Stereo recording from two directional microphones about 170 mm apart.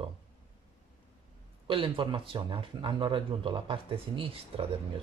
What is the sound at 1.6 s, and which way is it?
Speech, 30° right (ahead or behind).